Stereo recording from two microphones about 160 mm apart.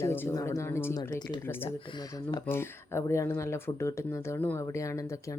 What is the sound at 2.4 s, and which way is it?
Speech, 15° left (ahead or behind).